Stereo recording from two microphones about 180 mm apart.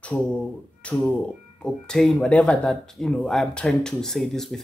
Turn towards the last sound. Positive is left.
turn(degrees=0)  # may be behind; listen again after turning